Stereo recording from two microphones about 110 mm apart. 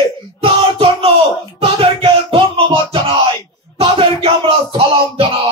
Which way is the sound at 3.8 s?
55° right (ahead or behind).